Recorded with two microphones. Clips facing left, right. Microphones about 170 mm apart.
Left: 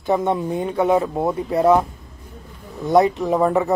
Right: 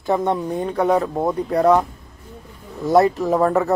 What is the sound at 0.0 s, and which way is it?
Speech, centre (ahead or behind).